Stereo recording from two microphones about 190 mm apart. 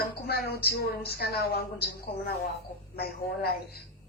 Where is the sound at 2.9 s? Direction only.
55° left (ahead or behind).